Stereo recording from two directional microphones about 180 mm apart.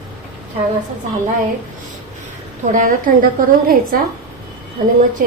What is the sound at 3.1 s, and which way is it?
A woman's voice, 50° right (ahead or behind).